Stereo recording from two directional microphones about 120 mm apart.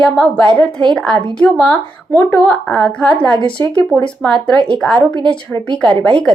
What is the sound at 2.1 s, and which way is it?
Speech, 20° left (ahead or behind).